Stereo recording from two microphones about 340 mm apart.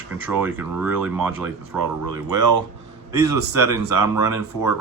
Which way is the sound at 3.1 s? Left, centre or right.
Centre.